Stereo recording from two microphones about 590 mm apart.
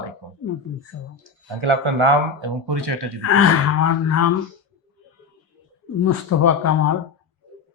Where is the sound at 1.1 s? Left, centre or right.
Right.